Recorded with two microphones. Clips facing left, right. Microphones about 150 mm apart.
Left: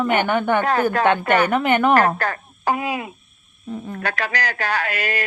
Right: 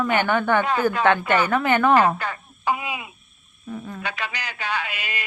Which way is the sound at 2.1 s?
40° left (ahead or behind).